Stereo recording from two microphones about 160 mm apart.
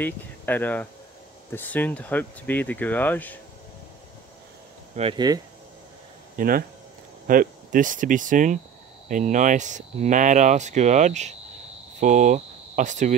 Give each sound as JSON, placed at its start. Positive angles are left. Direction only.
{"t": 0.0, "sound": "speech", "side_deg": 10}
{"t": 5.1, "sound": "speech", "side_deg": -25}
{"t": 6.3, "sound": "speech", "side_deg": -65}